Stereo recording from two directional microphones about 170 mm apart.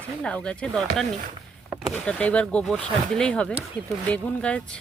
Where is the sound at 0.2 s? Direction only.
5° left (ahead or behind).